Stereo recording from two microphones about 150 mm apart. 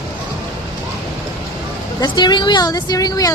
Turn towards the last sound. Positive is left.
turn(degrees=25)  # may be behind; listen again after turning